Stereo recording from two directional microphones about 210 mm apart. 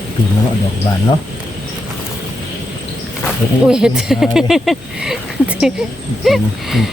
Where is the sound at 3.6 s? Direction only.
5° right (ahead or behind).